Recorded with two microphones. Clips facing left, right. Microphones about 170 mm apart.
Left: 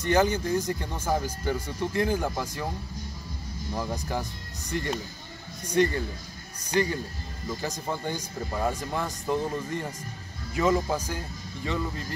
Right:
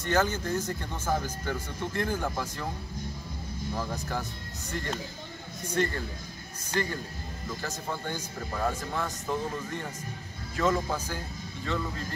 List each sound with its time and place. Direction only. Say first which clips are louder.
0.0 s speech: left 4 dB; 15° left (ahead or behind)
3.7 s speech: left 3 dB; 15° left (ahead or behind)
10.5 s speech: left 3 dB; 15° left (ahead or behind)